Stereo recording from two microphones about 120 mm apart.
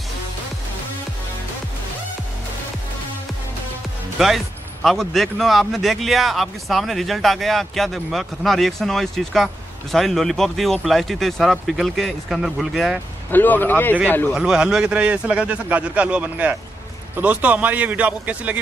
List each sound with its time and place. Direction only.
4.2 s a man's voice: centre (ahead or behind)
13.3 s speech: 15° left (ahead or behind)
14.3 s speech: 5° right (ahead or behind)